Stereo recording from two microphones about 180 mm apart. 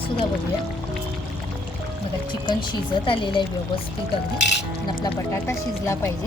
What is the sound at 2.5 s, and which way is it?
Speech, 25° left (ahead or behind).